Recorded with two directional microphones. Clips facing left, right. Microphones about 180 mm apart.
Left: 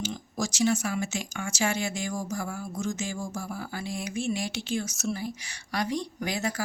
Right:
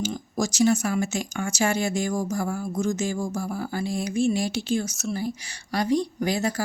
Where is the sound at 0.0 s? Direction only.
45° right (ahead or behind).